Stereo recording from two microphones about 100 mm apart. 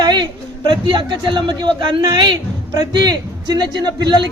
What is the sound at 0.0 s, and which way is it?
Speech, 50° right (ahead or behind).